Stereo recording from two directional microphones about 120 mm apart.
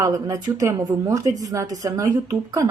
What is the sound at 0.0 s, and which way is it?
Speech, 30° right (ahead or behind).